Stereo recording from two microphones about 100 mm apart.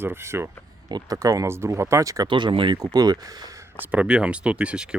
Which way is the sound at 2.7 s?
40° right (ahead or behind).